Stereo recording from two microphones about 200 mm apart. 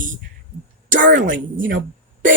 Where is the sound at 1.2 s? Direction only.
65° right (ahead or behind).